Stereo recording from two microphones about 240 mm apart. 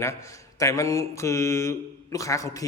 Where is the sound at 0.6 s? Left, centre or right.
Centre.